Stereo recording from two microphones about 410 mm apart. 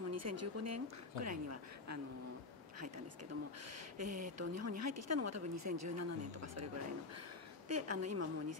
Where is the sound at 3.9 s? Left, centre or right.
Right.